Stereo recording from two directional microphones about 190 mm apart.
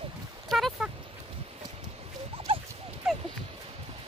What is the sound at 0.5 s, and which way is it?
Speech, centre (ahead or behind).